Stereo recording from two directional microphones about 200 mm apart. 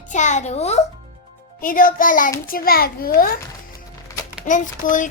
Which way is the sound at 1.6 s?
45° left (ahead or behind).